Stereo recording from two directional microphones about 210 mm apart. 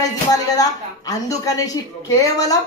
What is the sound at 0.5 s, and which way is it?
Speech, 15° left (ahead or behind).